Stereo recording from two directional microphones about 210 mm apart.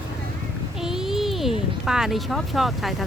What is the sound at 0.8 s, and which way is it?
A child's voice, centre (ahead or behind).